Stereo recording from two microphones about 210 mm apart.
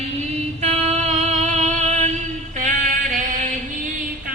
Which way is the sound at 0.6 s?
30° right (ahead or behind).